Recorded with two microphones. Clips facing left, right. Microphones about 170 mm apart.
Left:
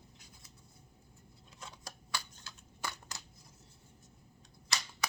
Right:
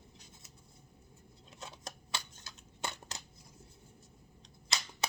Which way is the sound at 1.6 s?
20° right (ahead or behind).